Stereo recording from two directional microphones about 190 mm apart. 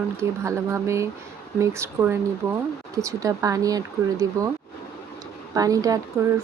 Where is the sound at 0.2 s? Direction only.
15° right (ahead or behind).